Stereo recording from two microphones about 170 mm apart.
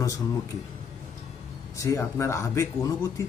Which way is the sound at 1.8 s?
20° left (ahead or behind).